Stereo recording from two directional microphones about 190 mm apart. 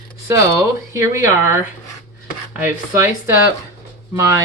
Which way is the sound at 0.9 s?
15° right (ahead or behind).